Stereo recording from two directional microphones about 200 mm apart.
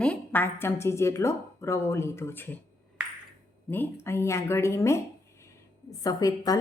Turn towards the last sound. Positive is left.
turn(degrees=20)  # may be behind; listen again after turning